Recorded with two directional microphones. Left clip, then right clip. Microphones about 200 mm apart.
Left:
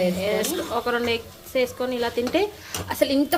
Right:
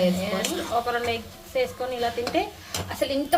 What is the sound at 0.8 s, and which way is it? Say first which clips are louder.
Speech: left 3 dB; 35° left (ahead or behind).